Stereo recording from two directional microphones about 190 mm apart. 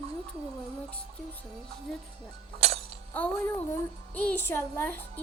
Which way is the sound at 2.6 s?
30° right (ahead or behind).